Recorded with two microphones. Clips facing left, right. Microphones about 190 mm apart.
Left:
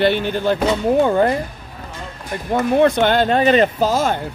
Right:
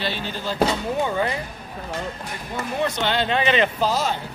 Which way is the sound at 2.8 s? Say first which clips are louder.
Left 6 dB; 55° left (ahead or behind).